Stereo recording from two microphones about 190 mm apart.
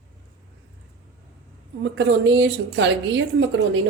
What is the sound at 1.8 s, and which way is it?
A woman's voice, 70° right (ahead or behind).